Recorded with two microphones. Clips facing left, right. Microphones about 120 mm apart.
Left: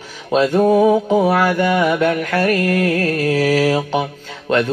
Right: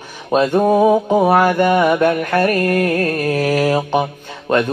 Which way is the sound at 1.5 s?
20° right (ahead or behind).